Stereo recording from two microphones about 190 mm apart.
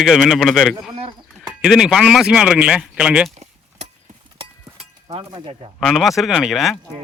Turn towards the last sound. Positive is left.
turn(degrees=0)  # may be behind; listen again after turning